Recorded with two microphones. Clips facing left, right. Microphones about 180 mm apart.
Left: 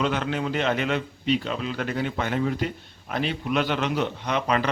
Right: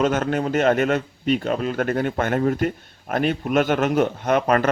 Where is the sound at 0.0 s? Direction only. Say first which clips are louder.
Right 5 dB; 45° right (ahead or behind).